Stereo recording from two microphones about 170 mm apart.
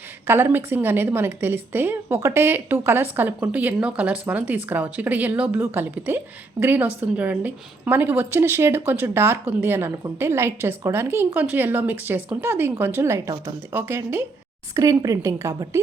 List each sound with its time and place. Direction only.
0.3 s a woman's voice: 15° right (ahead or behind)